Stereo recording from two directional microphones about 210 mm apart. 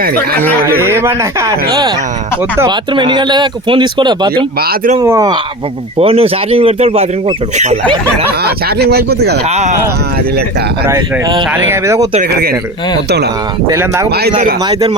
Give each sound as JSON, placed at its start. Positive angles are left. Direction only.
{"t": 0.8, "sound": "speech", "side_deg": -10}
{"t": 4.6, "sound": "speech", "side_deg": -45}
{"t": 4.9, "sound": "speech", "side_deg": -15}
{"t": 6.0, "sound": "speech", "side_deg": -30}
{"t": 8.4, "sound": "speech", "side_deg": -50}
{"t": 9.5, "sound": "speech", "side_deg": -30}
{"t": 10.8, "sound": "speech", "side_deg": -10}
{"t": 13.7, "sound": "speech", "side_deg": -15}
{"t": 14.1, "sound": "speech", "side_deg": -50}
{"t": 14.7, "sound": "speech", "side_deg": -20}